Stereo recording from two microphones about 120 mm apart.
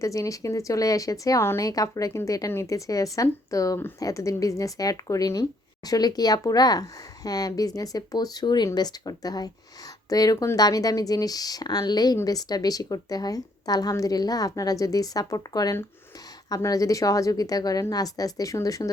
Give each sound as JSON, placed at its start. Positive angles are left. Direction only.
{"t": 0.0, "sound": "speech", "side_deg": 25}